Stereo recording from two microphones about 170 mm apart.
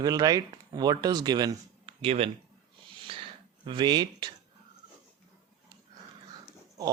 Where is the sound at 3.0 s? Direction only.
30° right (ahead or behind).